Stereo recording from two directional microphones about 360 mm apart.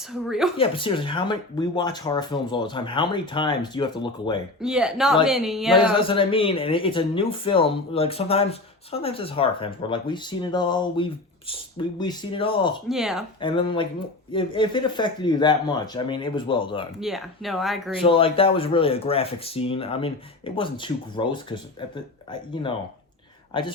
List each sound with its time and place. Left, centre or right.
0.1 s speech: centre
0.5 s speech: centre
4.6 s speech: centre
6.0 s speech: centre
12.9 s speech: centre
13.4 s speech: centre
17.0 s speech: centre
18.0 s speech: centre